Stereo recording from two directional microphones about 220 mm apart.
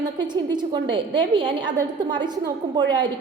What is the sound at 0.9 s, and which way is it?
A woman's voice, 20° right (ahead or behind).